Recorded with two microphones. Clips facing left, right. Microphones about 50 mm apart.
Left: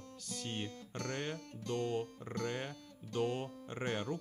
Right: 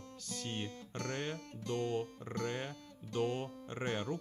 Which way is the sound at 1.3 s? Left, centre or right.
Right.